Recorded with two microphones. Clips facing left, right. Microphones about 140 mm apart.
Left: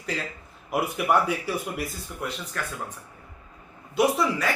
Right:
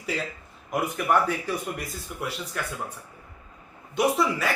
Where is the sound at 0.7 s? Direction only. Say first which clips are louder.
Left 1 dB; 10° left (ahead or behind).